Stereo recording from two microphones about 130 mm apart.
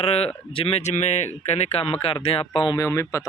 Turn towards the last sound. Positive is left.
turn(degrees=20)  # may be behind; listen again after turning